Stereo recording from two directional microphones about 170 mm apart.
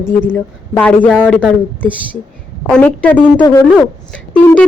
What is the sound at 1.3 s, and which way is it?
A woman's voice, 10° left (ahead or behind).